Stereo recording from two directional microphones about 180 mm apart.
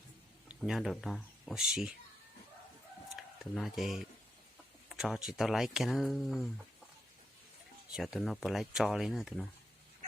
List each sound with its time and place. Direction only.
0.4 s speech: 5° right (ahead or behind)
3.2 s speech: centre (ahead or behind)
7.9 s speech: centre (ahead or behind)